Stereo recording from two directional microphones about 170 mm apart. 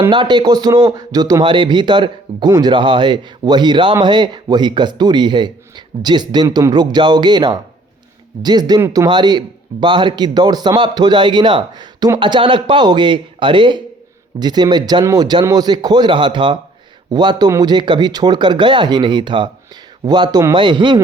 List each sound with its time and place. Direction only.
0.1 s a man's voice: 25° right (ahead or behind)